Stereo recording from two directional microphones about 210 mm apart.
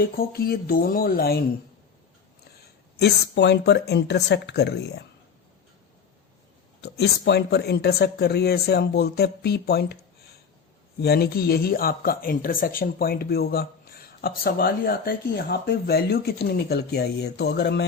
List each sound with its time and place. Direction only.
0.0 s speech: 45° left (ahead or behind)
3.0 s speech: 55° left (ahead or behind)
6.8 s speech: 50° left (ahead or behind)
11.0 s speech: 50° left (ahead or behind)